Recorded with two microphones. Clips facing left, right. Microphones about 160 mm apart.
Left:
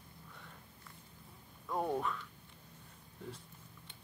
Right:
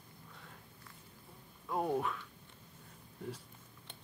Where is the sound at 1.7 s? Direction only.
5° right (ahead or behind).